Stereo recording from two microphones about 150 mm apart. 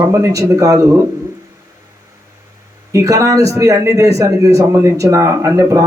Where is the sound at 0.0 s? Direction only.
20° right (ahead or behind).